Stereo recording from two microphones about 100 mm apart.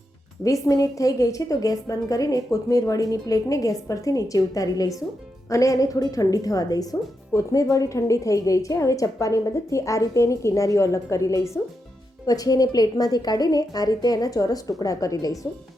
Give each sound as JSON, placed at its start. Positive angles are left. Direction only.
{"t": 0.4, "sound": "a woman's voice", "side_deg": 35}